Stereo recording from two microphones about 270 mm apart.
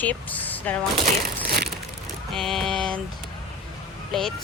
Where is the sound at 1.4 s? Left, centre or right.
Right.